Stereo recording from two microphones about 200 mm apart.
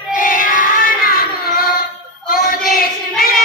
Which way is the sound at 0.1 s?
45° left (ahead or behind).